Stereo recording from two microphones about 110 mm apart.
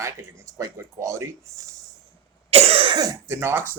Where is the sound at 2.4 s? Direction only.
65° right (ahead or behind).